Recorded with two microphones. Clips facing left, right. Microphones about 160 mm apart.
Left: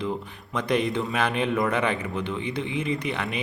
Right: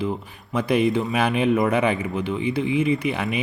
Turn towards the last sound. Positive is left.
turn(degrees=-10)  # may be behind; listen again after turning